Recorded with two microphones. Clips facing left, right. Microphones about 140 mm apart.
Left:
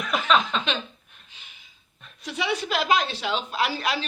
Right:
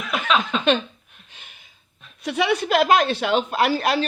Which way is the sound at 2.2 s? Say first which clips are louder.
Right 6 dB; 60° right (ahead or behind).